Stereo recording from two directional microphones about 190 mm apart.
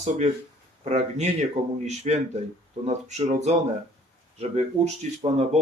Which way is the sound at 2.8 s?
35° right (ahead or behind).